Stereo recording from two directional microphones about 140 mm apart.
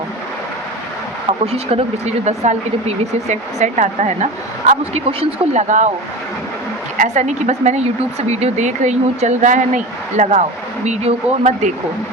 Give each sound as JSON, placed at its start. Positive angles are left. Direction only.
{"t": 1.3, "sound": "speech", "side_deg": -45}
{"t": 4.7, "sound": "speech", "side_deg": -45}
{"t": 5.6, "sound": "speech", "side_deg": -60}
{"t": 7.0, "sound": "speech", "side_deg": -55}